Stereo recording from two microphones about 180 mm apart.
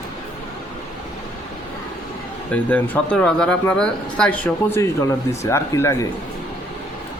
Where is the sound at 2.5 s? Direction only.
10° left (ahead or behind).